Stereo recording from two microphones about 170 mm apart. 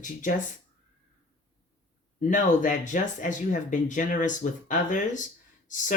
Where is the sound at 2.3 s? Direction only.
50° left (ahead or behind).